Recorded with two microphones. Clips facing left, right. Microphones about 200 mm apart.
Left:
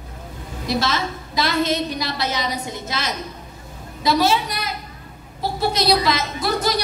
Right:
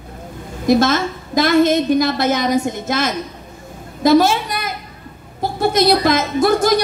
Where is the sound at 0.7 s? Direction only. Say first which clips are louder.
Right 9 dB; 50° right (ahead or behind).